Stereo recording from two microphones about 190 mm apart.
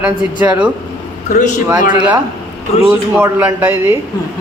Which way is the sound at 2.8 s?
10° right (ahead or behind).